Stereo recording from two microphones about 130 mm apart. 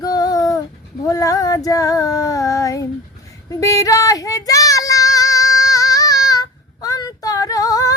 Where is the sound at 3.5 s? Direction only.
25° left (ahead or behind).